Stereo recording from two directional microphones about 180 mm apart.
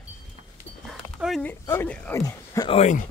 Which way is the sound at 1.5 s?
10° left (ahead or behind).